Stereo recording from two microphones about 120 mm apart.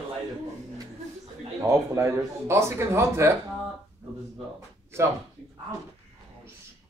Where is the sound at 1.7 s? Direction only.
25° right (ahead or behind).